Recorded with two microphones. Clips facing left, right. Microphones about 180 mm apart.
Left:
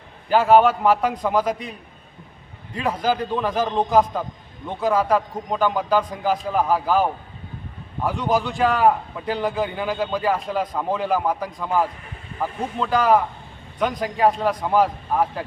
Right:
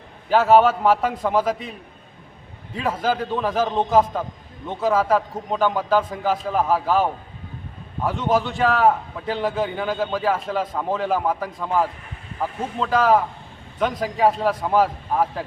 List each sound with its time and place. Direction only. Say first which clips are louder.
0.3 s a man's voice: even; centre (ahead or behind)
2.7 s a man's voice: even; centre (ahead or behind)